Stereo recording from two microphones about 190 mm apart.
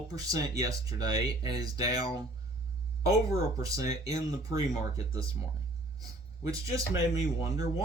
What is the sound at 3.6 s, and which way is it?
Speech, 20° right (ahead or behind).